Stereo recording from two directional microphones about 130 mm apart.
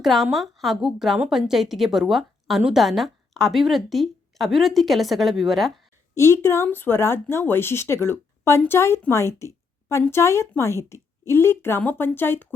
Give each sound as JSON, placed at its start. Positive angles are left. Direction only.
{"t": 0.0, "sound": "a woman's voice", "side_deg": 0}
{"t": 6.1, "sound": "speech", "side_deg": 20}